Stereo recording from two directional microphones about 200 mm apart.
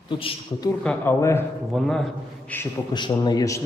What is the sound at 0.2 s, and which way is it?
Speech, 25° left (ahead or behind).